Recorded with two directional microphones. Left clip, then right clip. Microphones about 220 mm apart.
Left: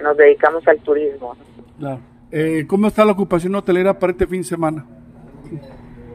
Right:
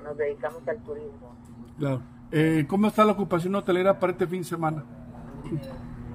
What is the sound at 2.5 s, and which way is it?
A man's voice, 30° left (ahead or behind).